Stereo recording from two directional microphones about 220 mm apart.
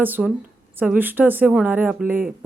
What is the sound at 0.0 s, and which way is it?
Speech, 5° right (ahead or behind).